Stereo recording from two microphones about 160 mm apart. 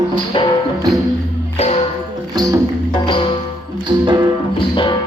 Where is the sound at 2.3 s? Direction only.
25° right (ahead or behind).